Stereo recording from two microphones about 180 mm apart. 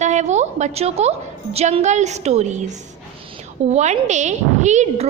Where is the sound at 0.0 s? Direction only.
40° right (ahead or behind).